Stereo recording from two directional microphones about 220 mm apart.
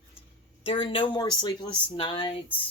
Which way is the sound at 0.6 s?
25° left (ahead or behind).